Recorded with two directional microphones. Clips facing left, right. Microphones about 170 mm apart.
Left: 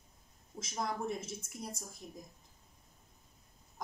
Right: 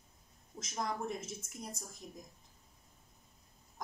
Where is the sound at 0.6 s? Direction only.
Centre (ahead or behind).